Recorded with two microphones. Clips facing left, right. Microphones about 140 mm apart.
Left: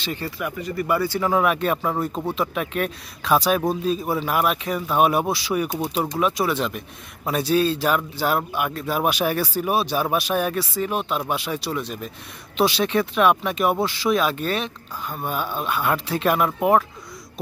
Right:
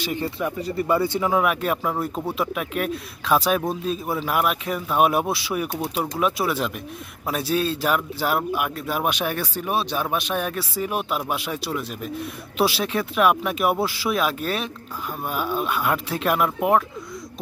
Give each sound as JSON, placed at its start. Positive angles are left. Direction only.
{"t": 0.0, "sound": "speech", "side_deg": -15}
{"t": 0.4, "sound": "speech", "side_deg": -30}
{"t": 1.3, "sound": "speech", "side_deg": -5}